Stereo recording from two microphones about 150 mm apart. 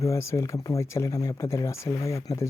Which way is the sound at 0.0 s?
20° left (ahead or behind).